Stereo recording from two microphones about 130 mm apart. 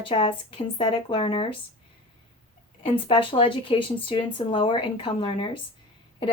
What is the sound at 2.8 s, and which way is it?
Speech, 45° left (ahead or behind).